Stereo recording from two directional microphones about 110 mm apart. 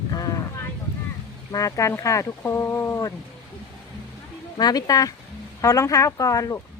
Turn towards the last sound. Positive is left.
turn(degrees=35)  # may be behind; listen again after turning